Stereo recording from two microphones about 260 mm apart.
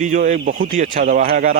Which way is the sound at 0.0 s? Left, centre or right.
Right.